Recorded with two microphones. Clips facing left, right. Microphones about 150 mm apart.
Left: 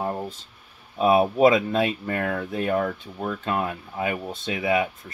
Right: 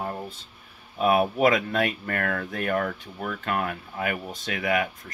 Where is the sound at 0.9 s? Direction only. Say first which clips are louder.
Left 3 dB; 25° left (ahead or behind).